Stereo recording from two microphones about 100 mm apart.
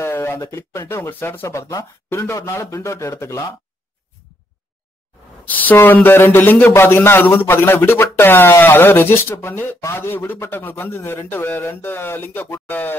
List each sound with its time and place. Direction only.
0.0 s a sound: 25° left (ahead or behind)
0.4 s a man's voice: 30° left (ahead or behind)
5.7 s a man's voice: 20° left (ahead or behind)